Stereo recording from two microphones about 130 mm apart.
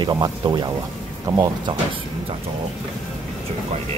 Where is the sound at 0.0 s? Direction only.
30° right (ahead or behind).